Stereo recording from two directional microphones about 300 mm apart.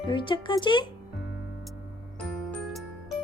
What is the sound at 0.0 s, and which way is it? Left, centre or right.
Speech, centre.